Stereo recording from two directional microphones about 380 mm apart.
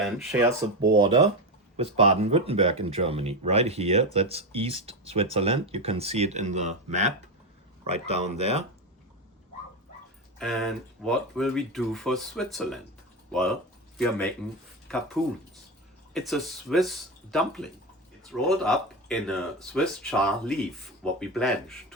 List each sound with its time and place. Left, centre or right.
0.0 s speech: centre
10.3 s speech: centre
14.8 s speech: centre